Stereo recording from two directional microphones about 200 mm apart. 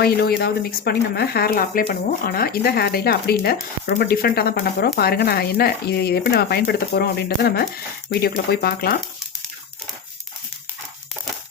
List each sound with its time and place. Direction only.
0.0 s speech: 50° left (ahead or behind)